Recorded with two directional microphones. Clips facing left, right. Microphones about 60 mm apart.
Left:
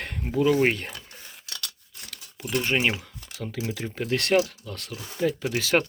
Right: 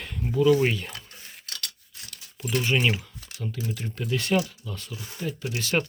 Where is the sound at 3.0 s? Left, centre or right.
Left.